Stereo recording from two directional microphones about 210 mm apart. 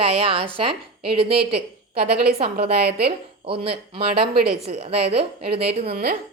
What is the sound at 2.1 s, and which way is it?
A woman's voice, 45° right (ahead or behind).